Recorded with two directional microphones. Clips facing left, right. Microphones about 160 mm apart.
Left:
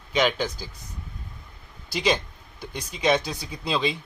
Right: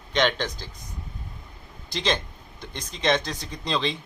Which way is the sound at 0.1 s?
5° left (ahead or behind).